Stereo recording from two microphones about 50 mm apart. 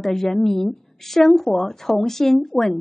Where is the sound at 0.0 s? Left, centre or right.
Centre.